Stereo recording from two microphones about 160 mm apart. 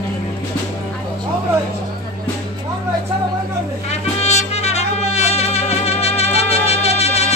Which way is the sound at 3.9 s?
40° left (ahead or behind).